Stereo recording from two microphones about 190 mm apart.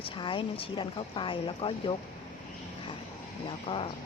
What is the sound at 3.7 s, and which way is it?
Speech, 30° left (ahead or behind).